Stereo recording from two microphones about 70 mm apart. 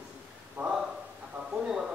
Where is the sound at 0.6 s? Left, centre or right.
Right.